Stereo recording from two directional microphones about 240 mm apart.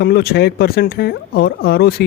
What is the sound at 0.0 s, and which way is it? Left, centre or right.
Speech, left.